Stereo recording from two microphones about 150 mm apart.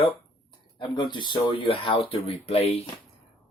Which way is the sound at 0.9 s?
30° left (ahead or behind).